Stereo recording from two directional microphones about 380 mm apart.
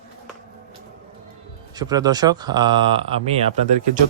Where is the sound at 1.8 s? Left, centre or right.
Centre.